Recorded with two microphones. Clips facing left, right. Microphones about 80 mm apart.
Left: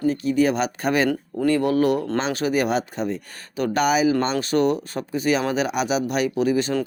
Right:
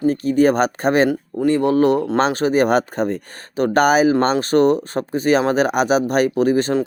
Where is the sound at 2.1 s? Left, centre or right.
Right.